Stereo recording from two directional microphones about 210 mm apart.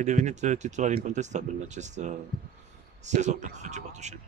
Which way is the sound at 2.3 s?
50° right (ahead or behind).